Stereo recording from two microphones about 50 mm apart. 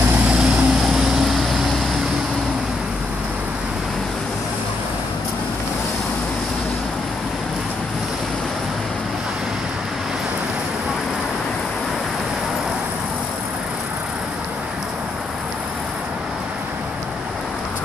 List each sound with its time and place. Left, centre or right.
0.3 s vehicle: right
0.7 s vehicle: centre